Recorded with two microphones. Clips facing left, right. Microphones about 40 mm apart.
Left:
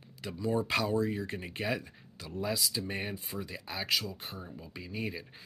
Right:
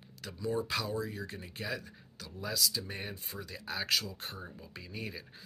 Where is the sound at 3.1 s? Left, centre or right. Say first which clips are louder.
Left 4 dB; centre.